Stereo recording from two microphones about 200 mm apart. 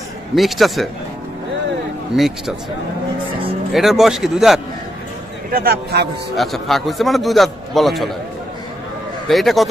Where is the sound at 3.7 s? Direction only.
Centre (ahead or behind).